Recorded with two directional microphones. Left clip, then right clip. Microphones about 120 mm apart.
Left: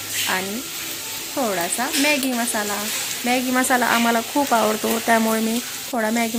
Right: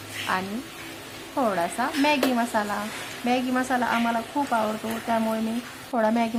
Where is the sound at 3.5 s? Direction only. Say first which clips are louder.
Left 6 dB; 40° left (ahead or behind).